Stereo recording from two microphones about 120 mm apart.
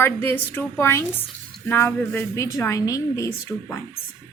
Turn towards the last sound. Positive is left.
turn(degrees=25)  # may be behind; listen again after turning